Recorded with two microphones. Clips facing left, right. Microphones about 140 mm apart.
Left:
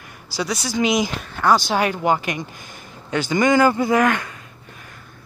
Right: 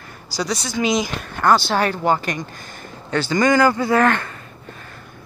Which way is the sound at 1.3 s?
5° left (ahead or behind).